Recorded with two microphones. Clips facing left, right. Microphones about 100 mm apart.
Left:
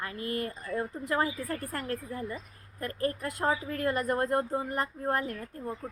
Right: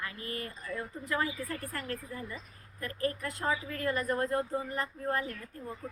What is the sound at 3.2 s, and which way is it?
Speech, 55° left (ahead or behind).